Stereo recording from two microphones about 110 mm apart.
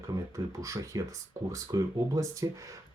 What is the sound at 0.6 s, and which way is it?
Speech, 30° right (ahead or behind).